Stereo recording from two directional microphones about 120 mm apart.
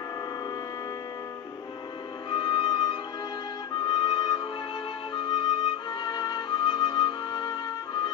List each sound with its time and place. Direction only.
2.3 s music: 45° left (ahead or behind)